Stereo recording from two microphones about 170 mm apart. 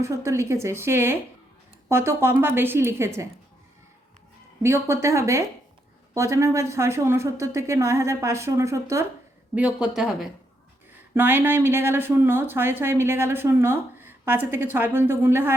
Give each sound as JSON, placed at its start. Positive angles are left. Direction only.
{"t": 0.0, "sound": "speech", "side_deg": -15}
{"t": 4.6, "sound": "speech", "side_deg": -15}
{"t": 9.6, "sound": "speech", "side_deg": -5}